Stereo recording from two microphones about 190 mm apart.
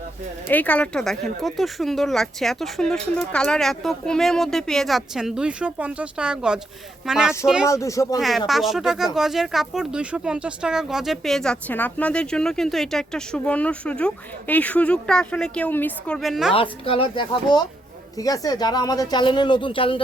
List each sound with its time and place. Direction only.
0.4 s speech: 10° left (ahead or behind)
7.6 s speech: 15° left (ahead or behind)
8.2 s speech: centre (ahead or behind)
16.6 s speech: 30° left (ahead or behind)